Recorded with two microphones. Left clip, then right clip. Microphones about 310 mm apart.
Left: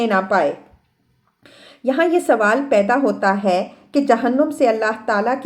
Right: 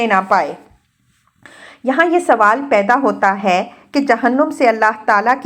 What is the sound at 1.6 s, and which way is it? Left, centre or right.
A woman's voice, centre.